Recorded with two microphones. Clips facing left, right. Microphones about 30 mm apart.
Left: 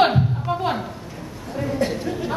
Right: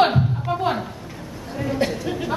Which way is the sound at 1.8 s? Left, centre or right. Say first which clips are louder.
Even; right.